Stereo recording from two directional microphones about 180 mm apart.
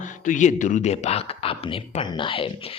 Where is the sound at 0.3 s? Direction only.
45° left (ahead or behind).